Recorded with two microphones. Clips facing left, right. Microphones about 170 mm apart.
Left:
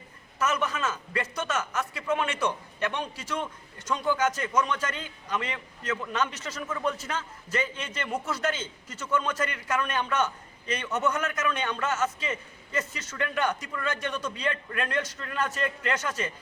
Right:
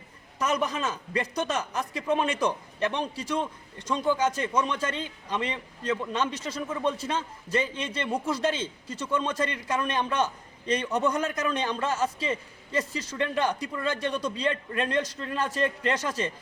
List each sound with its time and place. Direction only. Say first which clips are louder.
0.3 s a man's voice: right 1 dB; 35° right (ahead or behind)